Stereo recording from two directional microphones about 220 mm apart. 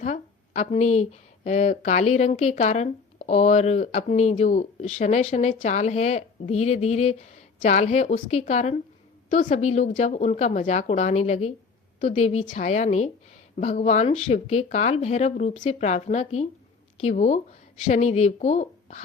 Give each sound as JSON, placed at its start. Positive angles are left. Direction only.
{"t": 0.0, "sound": "a woman's voice", "side_deg": 35}